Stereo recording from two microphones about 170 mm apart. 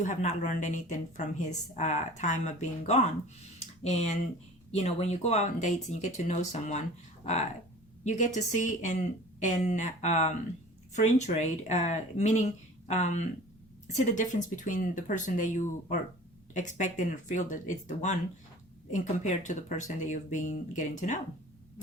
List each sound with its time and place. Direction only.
0.0 s a woman's voice: 45° left (ahead or behind)
8.0 s a woman's voice: 45° left (ahead or behind)